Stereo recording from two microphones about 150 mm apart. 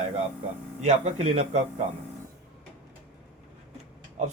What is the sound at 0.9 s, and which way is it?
Speech, 50° right (ahead or behind).